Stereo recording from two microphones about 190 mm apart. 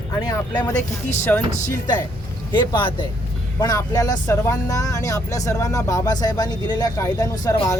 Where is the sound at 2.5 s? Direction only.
25° left (ahead or behind).